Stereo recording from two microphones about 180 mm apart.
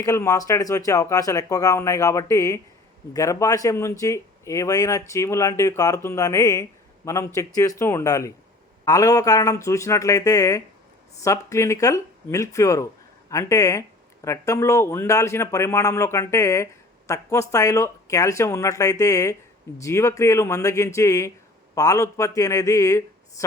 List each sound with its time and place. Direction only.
0.0 s a man's voice: 20° left (ahead or behind)